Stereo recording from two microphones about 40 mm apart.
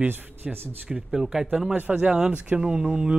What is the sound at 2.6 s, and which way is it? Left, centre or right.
Speech, centre.